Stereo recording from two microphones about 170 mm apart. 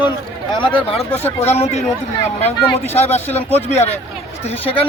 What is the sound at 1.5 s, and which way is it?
Speech, 40° left (ahead or behind).